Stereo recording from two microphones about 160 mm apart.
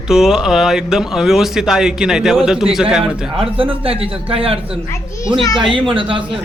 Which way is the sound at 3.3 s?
35° right (ahead or behind).